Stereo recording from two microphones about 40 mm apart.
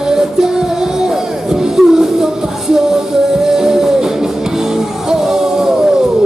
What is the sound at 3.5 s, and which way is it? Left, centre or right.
Music, centre.